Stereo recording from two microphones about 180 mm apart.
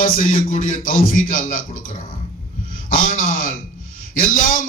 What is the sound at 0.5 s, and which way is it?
Speech, 45° left (ahead or behind).